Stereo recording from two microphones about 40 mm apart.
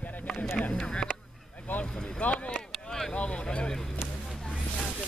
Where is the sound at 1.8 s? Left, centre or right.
Left.